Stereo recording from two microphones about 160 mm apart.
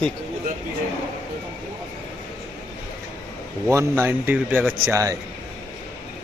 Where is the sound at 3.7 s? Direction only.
15° right (ahead or behind).